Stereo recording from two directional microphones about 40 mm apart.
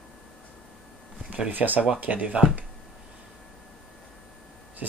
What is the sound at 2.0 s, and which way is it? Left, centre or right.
Speech, right.